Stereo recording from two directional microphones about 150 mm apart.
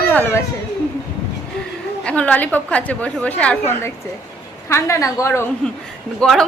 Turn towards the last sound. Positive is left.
turn(degrees=5)  # may be behind; listen again after turning